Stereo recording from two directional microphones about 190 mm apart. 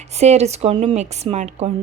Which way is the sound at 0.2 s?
35° right (ahead or behind).